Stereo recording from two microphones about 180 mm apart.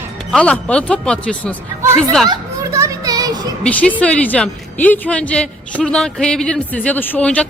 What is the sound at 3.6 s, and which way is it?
A woman's voice, 10° left (ahead or behind).